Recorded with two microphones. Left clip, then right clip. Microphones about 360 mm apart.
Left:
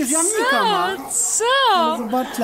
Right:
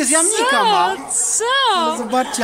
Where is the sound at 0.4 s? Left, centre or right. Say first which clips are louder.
Right 3 dB; centre.